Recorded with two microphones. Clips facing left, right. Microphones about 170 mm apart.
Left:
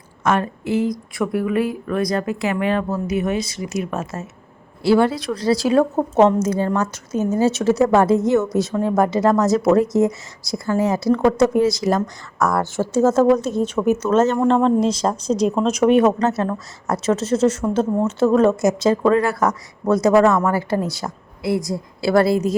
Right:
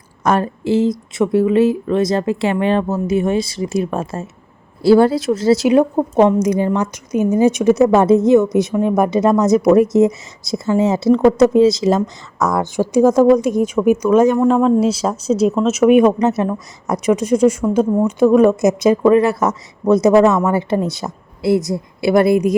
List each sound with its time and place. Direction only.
0.2 s speech: 35° right (ahead or behind); by 22.5 s 15° right (ahead or behind)